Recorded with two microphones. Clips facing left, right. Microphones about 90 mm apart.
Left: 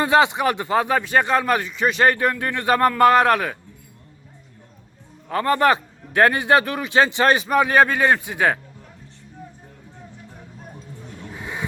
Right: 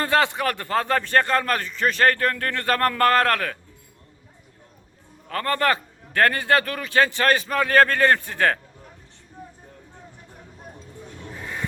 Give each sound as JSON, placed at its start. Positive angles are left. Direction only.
{"t": 0.0, "sound": "a man's voice", "side_deg": 15}
{"t": 5.3, "sound": "a man's voice", "side_deg": 15}
{"t": 11.3, "sound": "a sound", "side_deg": 15}